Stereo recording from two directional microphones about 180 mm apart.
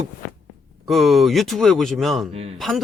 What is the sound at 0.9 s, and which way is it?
Speech, centre (ahead or behind).